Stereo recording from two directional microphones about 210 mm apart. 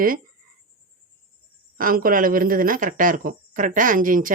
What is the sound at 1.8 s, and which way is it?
Speech, 45° right (ahead or behind).